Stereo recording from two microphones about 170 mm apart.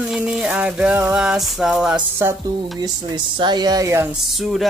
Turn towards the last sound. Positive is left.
turn(degrees=0)  # may be behind; listen again after turning